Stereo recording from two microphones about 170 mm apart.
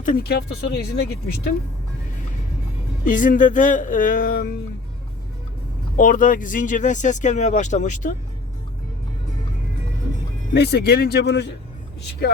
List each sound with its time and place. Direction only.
0.0 s speech: 60° left (ahead or behind)
3.0 s speech: 50° left (ahead or behind)
6.0 s speech: 50° left (ahead or behind)
10.5 s speech: 80° left
12.2 s speech: 70° left (ahead or behind)